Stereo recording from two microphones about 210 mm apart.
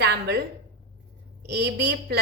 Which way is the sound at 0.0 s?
50° right (ahead or behind).